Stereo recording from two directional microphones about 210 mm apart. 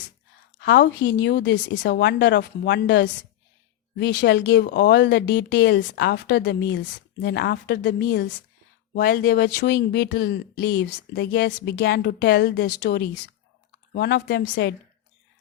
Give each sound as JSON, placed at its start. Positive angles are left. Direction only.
{"t": 0.6, "sound": "speech", "side_deg": 55}